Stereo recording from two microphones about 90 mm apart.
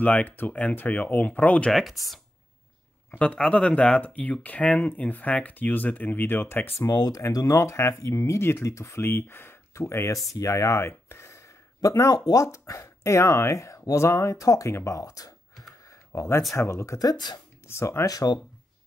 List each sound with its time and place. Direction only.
0.0 s speech: 20° left (ahead or behind)
1.7 s speech: centre (ahead or behind)
3.1 s speech: 15° left (ahead or behind); by 15.3 s 40° left (ahead or behind)
15.9 s a sound: 35° left (ahead or behind)
16.5 s speech: 35° left (ahead or behind)
18.0 s speech: 45° left (ahead or behind)